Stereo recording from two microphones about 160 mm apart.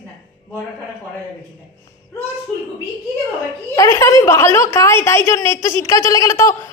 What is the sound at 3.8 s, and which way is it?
A woman's voice, 20° left (ahead or behind).